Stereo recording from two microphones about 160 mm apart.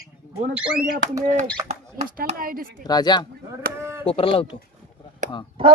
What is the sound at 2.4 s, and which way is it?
Speech, 65° right (ahead or behind).